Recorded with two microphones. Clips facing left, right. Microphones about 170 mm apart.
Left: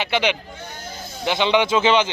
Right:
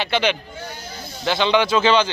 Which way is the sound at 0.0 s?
15° left (ahead or behind).